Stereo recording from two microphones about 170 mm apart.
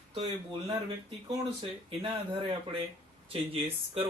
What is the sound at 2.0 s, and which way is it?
Speech, 30° right (ahead or behind).